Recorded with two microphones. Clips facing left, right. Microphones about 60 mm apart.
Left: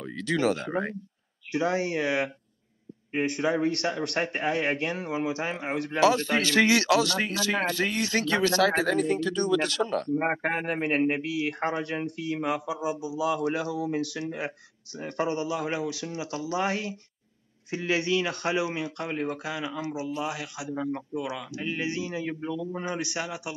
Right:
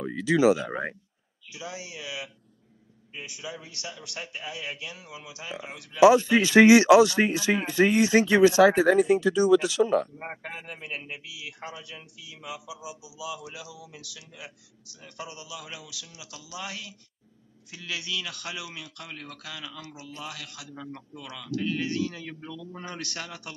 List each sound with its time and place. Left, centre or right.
0.0 s speech: centre
1.5 s a man's voice: left
5.9 s a man's voice: centre
10.1 s a man's voice: left; by 23.5 s centre